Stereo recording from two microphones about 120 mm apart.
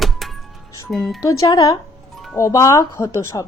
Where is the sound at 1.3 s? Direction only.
30° left (ahead or behind).